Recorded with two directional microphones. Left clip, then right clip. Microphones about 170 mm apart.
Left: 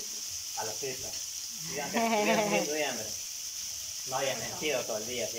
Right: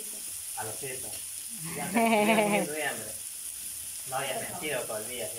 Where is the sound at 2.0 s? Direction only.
15° right (ahead or behind).